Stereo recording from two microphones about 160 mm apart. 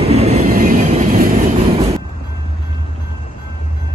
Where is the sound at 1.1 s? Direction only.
60° right (ahead or behind).